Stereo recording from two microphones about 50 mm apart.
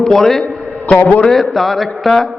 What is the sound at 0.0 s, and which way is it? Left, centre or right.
Speech, centre.